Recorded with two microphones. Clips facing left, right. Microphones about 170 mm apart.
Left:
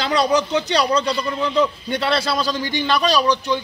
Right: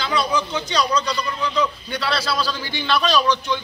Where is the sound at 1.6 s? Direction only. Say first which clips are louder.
Left 4 dB; 50° left (ahead or behind).